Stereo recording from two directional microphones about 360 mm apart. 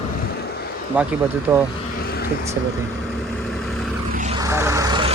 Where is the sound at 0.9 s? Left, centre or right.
Centre.